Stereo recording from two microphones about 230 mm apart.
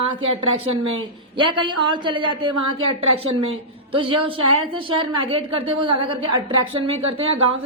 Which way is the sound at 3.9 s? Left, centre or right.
Right.